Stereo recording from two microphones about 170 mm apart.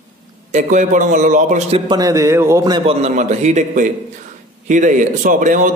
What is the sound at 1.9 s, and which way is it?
A man's voice, 20° right (ahead or behind).